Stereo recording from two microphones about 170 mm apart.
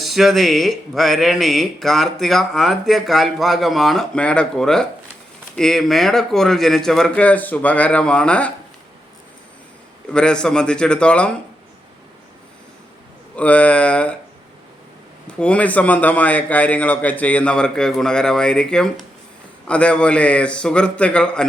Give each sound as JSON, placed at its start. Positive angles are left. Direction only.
{"t": 0.0, "sound": "speech", "side_deg": 0}
{"t": 10.1, "sound": "speech", "side_deg": 5}
{"t": 13.3, "sound": "a man's voice", "side_deg": 10}
{"t": 15.3, "sound": "a man's voice", "side_deg": 5}